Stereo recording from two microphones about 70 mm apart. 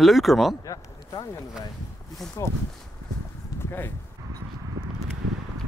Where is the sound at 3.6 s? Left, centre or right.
Left.